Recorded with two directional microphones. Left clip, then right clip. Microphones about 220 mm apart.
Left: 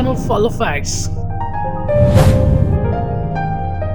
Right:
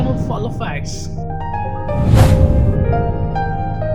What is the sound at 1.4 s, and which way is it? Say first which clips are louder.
Music: left 2 dB; centre (ahead or behind).